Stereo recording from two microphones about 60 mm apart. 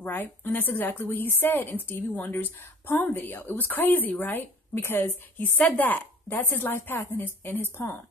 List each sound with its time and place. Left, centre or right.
0.0 s a woman's voice: left
5.6 s a woman's voice: left